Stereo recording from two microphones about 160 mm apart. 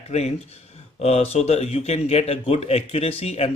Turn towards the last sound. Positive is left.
turn(degrees=40)  # may be behind; listen again after turning